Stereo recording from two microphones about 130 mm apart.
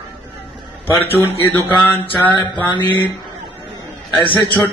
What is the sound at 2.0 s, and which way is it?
Speech, 35° left (ahead or behind).